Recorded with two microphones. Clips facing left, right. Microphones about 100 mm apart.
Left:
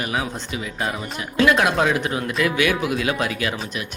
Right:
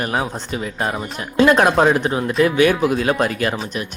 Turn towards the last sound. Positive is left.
turn(degrees=-45)  # may be behind; listen again after turning